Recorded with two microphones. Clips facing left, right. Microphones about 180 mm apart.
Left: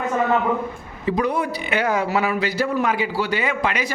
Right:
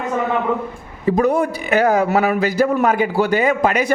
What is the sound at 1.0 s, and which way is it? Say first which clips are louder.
A man's voice: right 6 dB; 45° right (ahead or behind).